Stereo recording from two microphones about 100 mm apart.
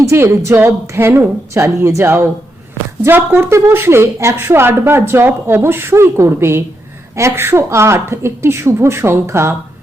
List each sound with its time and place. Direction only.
0.0 s a woman's voice: 30° right (ahead or behind)